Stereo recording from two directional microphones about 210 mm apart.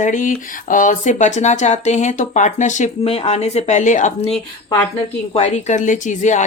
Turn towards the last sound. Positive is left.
turn(degrees=35)  # may be behind; listen again after turning